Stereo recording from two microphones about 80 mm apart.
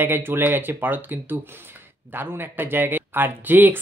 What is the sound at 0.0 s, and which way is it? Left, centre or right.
Speech, right.